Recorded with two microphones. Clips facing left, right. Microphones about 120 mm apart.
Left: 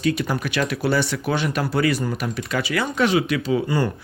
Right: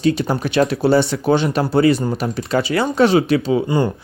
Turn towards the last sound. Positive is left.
turn(degrees=-25)  # may be behind; listen again after turning